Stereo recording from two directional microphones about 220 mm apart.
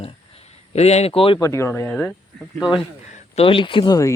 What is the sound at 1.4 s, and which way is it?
Speech, 15° left (ahead or behind).